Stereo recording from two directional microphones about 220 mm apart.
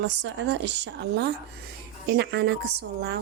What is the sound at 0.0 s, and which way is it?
Speech, 55° right (ahead or behind).